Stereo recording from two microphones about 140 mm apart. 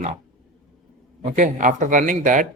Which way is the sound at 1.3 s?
65° right (ahead or behind).